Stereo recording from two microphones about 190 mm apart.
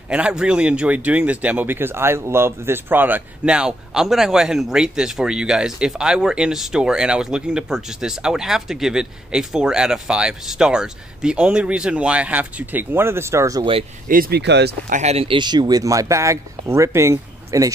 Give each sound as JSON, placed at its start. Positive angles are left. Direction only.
{"t": 0.1, "sound": "speech", "side_deg": -5}
{"t": 14.0, "sound": "speech", "side_deg": -50}
{"t": 14.9, "sound": "speech", "side_deg": -35}